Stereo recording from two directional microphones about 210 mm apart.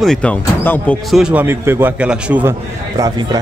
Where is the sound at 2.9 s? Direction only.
20° right (ahead or behind).